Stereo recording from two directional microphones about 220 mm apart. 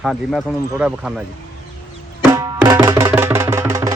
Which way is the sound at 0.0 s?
Centre (ahead or behind).